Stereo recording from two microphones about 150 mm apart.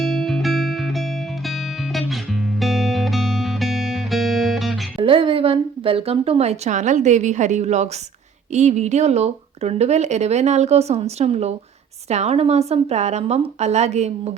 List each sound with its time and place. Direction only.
0.0 s music: centre (ahead or behind)
4.9 s speech: 35° right (ahead or behind)